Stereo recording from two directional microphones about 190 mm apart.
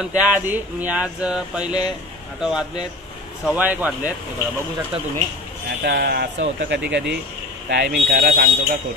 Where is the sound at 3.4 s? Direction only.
10° right (ahead or behind).